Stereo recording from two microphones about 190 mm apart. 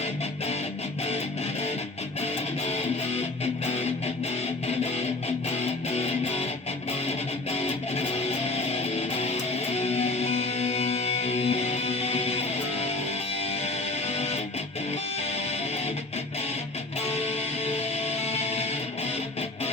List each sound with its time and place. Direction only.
5.5 s music: 35° left (ahead or behind)
7.5 s music: 35° left (ahead or behind)
14.1 s music: 35° left (ahead or behind)
17.1 s music: 35° left (ahead or behind)